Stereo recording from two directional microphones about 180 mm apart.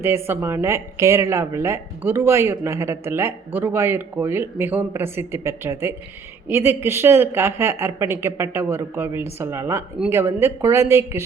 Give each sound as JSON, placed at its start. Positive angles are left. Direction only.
{"t": 0.0, "sound": "speech", "side_deg": -15}